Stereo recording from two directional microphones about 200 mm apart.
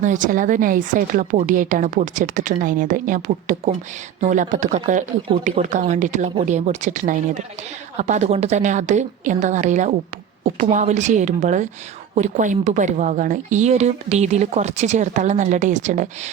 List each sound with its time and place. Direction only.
0.0 s a woman's voice: 40° right (ahead or behind)